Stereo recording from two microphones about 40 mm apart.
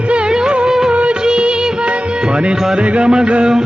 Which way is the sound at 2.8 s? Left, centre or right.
Right.